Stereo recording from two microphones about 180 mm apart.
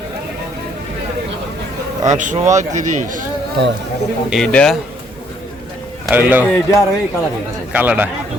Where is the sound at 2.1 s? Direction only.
45° right (ahead or behind).